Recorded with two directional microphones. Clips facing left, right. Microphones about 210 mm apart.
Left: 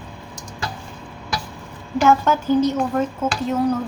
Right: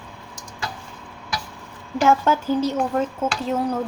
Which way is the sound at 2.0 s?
30° right (ahead or behind).